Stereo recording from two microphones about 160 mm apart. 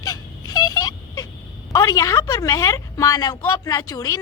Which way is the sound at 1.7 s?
20° left (ahead or behind).